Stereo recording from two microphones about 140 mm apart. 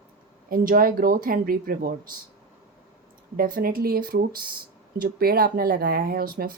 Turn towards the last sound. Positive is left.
turn(degrees=-90)